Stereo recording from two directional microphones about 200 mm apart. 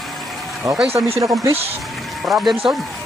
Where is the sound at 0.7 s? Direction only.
20° right (ahead or behind).